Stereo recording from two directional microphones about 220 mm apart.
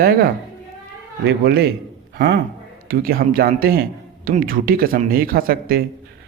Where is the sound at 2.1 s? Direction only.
50° right (ahead or behind).